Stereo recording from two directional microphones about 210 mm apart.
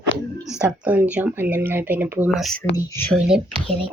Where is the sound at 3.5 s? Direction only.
25° right (ahead or behind).